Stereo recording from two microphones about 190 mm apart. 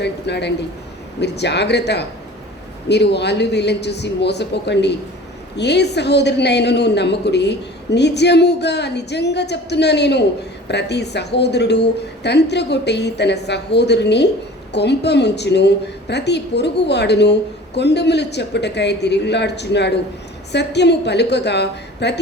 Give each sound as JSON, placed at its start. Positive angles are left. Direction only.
{"t": 0.0, "sound": "a woman's voice", "side_deg": 65}